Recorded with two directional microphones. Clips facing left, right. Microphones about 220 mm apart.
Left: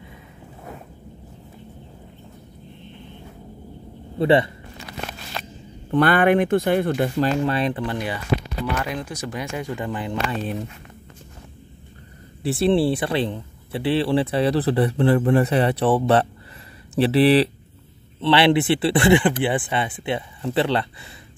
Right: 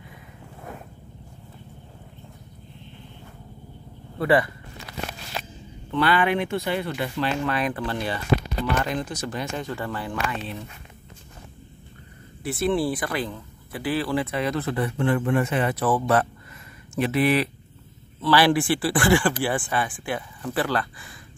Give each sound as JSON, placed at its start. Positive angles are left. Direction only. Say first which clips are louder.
{"t": 4.2, "sound": "speech", "louder": "left 3 dB", "side_deg": 25}
{"t": 5.4, "sound": "a sound", "louder": "even", "side_deg": -5}
{"t": 5.9, "sound": "speech", "louder": "left 5 dB", "side_deg": 50}
{"t": 7.4, "sound": "speech", "louder": "left 3 dB", "side_deg": 30}
{"t": 10.1, "sound": "speech", "louder": "left 4 dB", "side_deg": 45}
{"t": 12.4, "sound": "speech", "louder": "left 5 dB", "side_deg": 30}